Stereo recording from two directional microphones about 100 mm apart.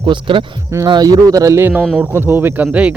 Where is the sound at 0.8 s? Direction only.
45° right (ahead or behind).